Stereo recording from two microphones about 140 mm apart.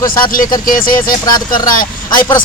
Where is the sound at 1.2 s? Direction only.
30° left (ahead or behind).